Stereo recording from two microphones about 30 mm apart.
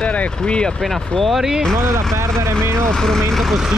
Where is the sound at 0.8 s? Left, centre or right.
Centre.